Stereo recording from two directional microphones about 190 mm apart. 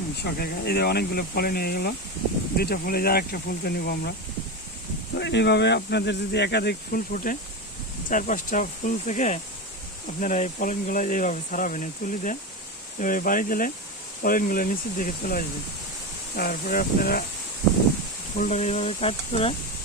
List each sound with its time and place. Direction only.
0.2 s speech: 55° left (ahead or behind)
5.1 s speech: 65° left (ahead or behind)
18.3 s speech: 40° left (ahead or behind)